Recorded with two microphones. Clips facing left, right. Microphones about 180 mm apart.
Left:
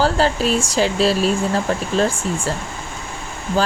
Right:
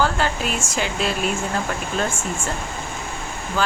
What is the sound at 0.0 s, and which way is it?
Speech, 35° left (ahead or behind).